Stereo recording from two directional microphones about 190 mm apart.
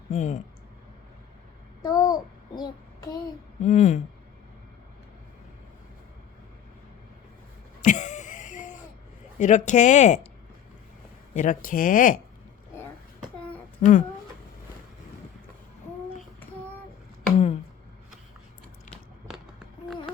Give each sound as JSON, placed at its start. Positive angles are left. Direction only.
{"t": 0.1, "sound": "speech", "side_deg": 40}
{"t": 1.9, "sound": "a child's voice", "side_deg": 20}
{"t": 3.6, "sound": "speech", "side_deg": 40}
{"t": 7.9, "sound": "a sound", "side_deg": 40}
{"t": 9.4, "sound": "speech", "side_deg": 40}
{"t": 11.3, "sound": "speech", "side_deg": 45}
{"t": 13.8, "sound": "speech", "side_deg": 40}
{"t": 17.3, "sound": "a sound", "side_deg": 35}
{"t": 18.9, "sound": "a sound", "side_deg": 0}